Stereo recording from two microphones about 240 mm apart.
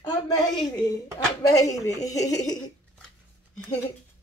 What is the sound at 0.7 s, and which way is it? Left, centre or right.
Speech, centre.